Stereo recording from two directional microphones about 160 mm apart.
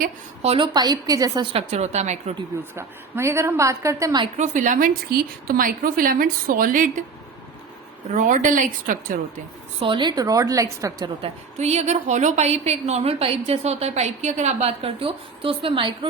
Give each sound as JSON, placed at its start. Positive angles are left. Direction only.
{"t": 0.4, "sound": "a woman's voice", "side_deg": -35}
{"t": 1.5, "sound": "a woman's voice", "side_deg": -45}
{"t": 2.7, "sound": "a woman's voice", "side_deg": -15}
{"t": 4.4, "sound": "a woman's voice", "side_deg": -50}
{"t": 8.1, "sound": "a woman's voice", "side_deg": -55}
{"t": 9.8, "sound": "a woman's voice", "side_deg": -30}
{"t": 11.2, "sound": "a woman's voice", "side_deg": -45}